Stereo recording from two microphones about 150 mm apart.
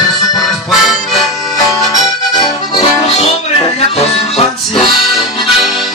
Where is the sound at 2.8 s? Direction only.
45° left (ahead or behind).